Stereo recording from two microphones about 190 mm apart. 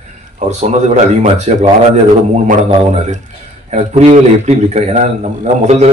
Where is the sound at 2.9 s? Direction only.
35° right (ahead or behind).